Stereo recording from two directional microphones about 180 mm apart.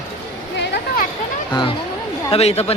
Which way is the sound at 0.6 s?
70° left (ahead or behind).